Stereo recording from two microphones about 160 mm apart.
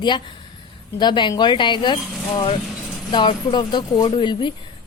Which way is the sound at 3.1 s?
30° left (ahead or behind).